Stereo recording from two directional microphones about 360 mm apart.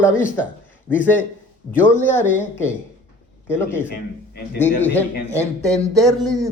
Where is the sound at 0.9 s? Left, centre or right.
Centre.